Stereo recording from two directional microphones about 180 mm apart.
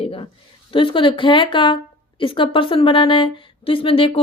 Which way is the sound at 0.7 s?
30° left (ahead or behind).